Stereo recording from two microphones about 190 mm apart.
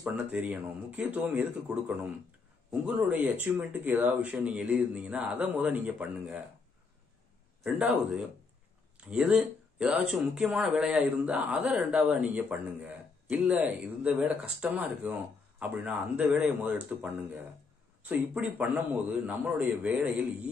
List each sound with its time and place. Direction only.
0.0 s speech: 5° right (ahead or behind)
7.6 s speech: centre (ahead or behind)